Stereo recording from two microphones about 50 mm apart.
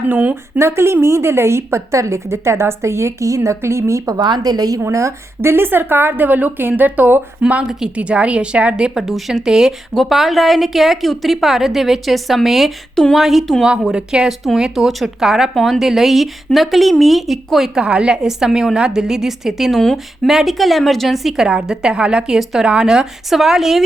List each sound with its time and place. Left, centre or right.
0.1 s a woman's voice: right
0.6 s a woman's voice: right
4.9 s speech: right
5.5 s a woman's voice: right; by 9.0 s centre
9.0 s a woman's voice: centre
9.9 s a woman's voice: centre
13.9 s a woman's voice: centre
17.7 s a woman's voice: centre
21.4 s a woman's voice: centre